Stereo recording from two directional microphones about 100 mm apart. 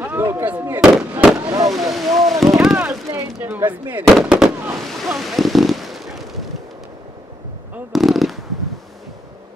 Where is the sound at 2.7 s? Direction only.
20° right (ahead or behind).